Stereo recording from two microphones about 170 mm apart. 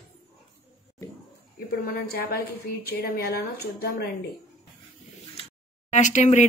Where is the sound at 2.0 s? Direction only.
65° left (ahead or behind).